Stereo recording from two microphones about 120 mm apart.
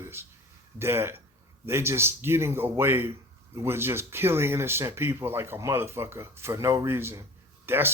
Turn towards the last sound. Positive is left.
turn(degrees=-20)  # may be behind; listen again after turning